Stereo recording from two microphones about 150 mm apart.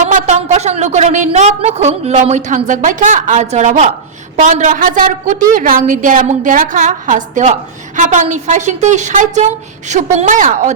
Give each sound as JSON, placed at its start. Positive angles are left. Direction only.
{"t": 0.0, "sound": "a woman's voice", "side_deg": -50}